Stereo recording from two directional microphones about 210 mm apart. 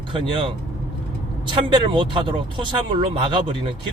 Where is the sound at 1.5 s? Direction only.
25° right (ahead or behind).